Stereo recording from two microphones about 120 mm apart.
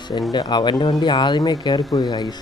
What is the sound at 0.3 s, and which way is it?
Speech, 35° left (ahead or behind).